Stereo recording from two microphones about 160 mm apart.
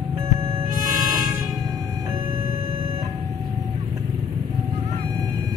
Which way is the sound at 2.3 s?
40° right (ahead or behind).